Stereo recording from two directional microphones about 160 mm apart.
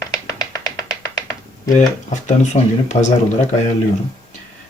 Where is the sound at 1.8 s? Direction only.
45° left (ahead or behind).